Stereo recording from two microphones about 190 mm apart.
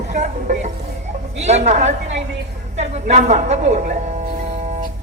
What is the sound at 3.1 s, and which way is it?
Speech, 40° right (ahead or behind).